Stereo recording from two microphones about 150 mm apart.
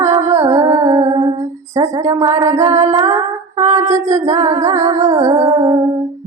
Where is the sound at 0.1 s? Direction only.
20° right (ahead or behind).